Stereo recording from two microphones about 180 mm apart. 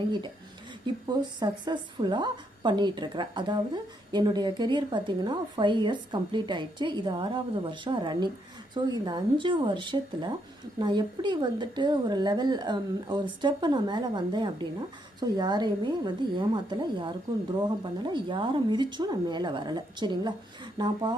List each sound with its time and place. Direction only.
1.0 s a woman's voice: 25° right (ahead or behind)